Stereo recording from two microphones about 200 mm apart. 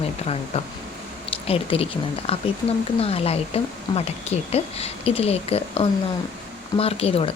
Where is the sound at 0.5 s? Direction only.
30° left (ahead or behind).